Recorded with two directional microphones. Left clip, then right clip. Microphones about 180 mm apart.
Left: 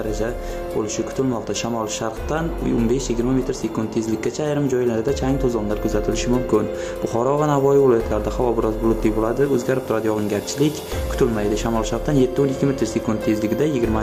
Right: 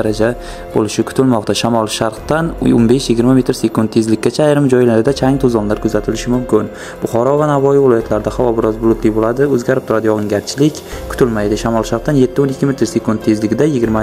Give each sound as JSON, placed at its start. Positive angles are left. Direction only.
{"t": 0.0, "sound": "speech", "side_deg": -50}